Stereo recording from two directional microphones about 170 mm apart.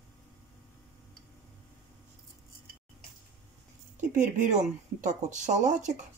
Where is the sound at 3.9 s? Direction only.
45° right (ahead or behind).